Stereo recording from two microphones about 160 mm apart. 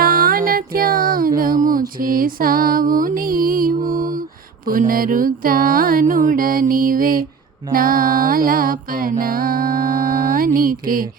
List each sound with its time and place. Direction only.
0.0 s music: 65° right (ahead or behind)
1.4 s a sound: 60° right (ahead or behind)
2.0 s music: 60° right (ahead or behind)